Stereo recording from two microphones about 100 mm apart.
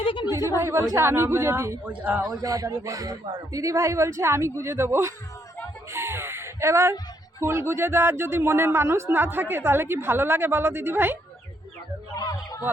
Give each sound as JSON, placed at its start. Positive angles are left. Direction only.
{"t": 0.0, "sound": "a sound", "side_deg": 65}
{"t": 0.6, "sound": "a man's voice", "side_deg": -30}
{"t": 1.9, "sound": "a man's voice", "side_deg": -15}
{"t": 2.4, "sound": "a man's voice", "side_deg": -35}
{"t": 5.9, "sound": "gasp", "side_deg": -25}
{"t": 7.3, "sound": "a man's voice", "side_deg": -25}
{"t": 12.1, "sound": "speech", "side_deg": 40}
{"t": 12.7, "sound": "chicken", "side_deg": -20}